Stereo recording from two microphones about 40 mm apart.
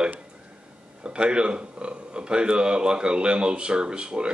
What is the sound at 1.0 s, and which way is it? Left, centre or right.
Speech, right.